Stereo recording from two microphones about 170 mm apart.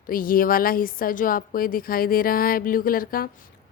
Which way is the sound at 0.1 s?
55° left (ahead or behind).